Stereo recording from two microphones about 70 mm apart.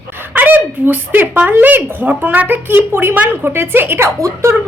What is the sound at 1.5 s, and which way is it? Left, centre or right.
A woman's voice, right.